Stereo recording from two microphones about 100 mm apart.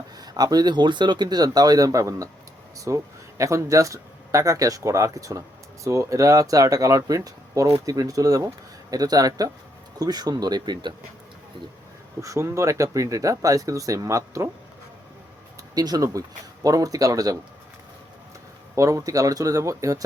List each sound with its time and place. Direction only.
0.2 s speech: 40° right (ahead or behind)
12.2 s speech: 30° right (ahead or behind)
15.7 s speech: 40° right (ahead or behind)
18.8 s speech: 35° right (ahead or behind)